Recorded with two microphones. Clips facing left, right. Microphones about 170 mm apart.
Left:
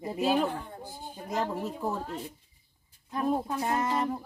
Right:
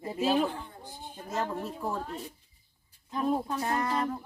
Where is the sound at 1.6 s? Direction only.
20° left (ahead or behind).